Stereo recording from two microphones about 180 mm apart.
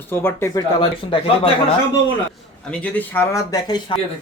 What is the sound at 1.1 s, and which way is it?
Speech, 30° left (ahead or behind).